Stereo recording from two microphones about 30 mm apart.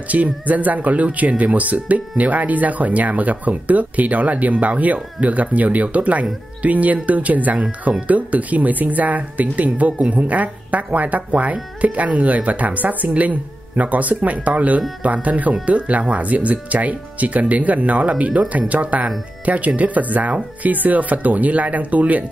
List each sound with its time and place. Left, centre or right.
0.1 s speech: right